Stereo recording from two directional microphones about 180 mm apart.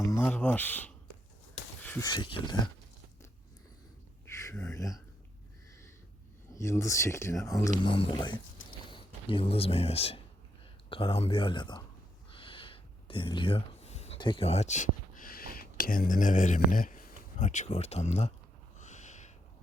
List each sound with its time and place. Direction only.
0.0 s speech: 15° left (ahead or behind)
1.8 s a sound: 10° left (ahead or behind)
2.0 s speech: 25° left (ahead or behind)
4.3 s speech: 15° left (ahead or behind)
6.6 s speech: 15° left (ahead or behind)
12.3 s a sound: 30° left (ahead or behind)
18.8 s owl: 40° left (ahead or behind)